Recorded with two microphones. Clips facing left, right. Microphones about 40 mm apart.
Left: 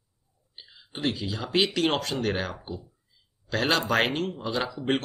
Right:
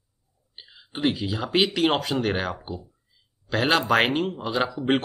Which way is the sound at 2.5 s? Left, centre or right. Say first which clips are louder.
Right 3 dB; right.